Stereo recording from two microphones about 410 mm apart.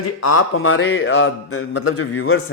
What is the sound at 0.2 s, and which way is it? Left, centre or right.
A man's voice, left.